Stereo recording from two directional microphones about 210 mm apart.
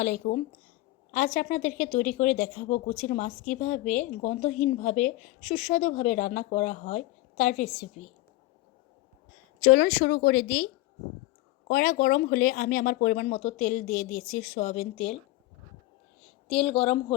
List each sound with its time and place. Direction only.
0.2 s speech: 35° left (ahead or behind)
9.6 s speech: 45° left (ahead or behind)
11.7 s speech: 40° left (ahead or behind)
16.6 s speech: 25° left (ahead or behind)